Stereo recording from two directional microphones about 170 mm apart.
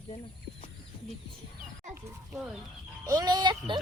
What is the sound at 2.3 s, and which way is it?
Speech, centre (ahead or behind).